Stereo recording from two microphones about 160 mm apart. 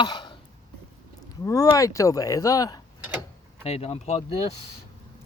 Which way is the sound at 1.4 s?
20° left (ahead or behind).